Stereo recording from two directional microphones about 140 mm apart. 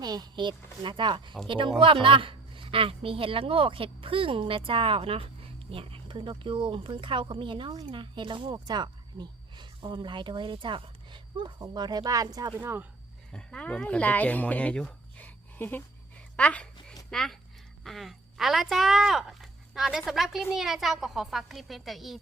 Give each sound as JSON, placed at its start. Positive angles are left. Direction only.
{"t": 0.0, "sound": "a woman's voice", "side_deg": -30}
{"t": 12.5, "sound": "speech", "side_deg": -15}
{"t": 13.3, "sound": "speech", "side_deg": 10}